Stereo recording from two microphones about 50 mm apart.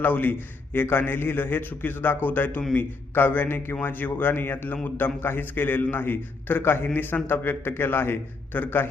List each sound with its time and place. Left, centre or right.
0.0 s a man's voice: left